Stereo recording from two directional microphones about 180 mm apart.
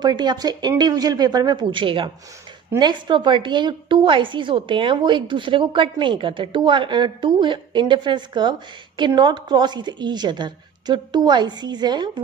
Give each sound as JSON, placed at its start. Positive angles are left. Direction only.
{"t": 0.0, "sound": "a woman's voice", "side_deg": -25}